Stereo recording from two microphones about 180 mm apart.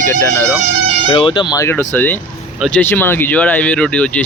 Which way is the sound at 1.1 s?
30° left (ahead or behind).